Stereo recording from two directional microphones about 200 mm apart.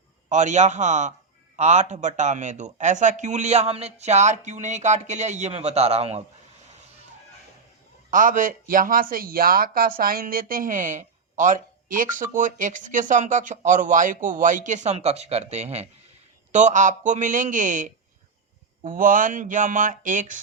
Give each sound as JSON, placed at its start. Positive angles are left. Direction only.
{"t": 0.3, "sound": "speech", "side_deg": -35}
{"t": 8.1, "sound": "speech", "side_deg": -40}